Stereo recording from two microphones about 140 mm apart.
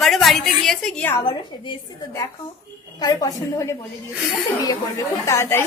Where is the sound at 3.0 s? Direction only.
30° left (ahead or behind).